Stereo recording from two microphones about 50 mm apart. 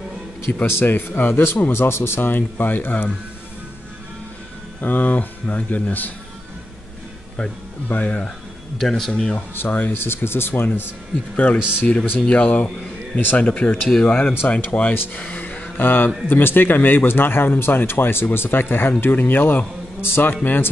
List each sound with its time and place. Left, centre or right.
0.7 s speech: left
4.8 s speech: left
7.9 s speech: left
8.7 s speech: centre
9.6 s speech: left
11.3 s speech: left
12.4 s a sound: left
13.4 s speech: left